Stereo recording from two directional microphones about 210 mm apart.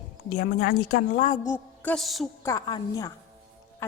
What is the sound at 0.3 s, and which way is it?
Speech, 40° left (ahead or behind).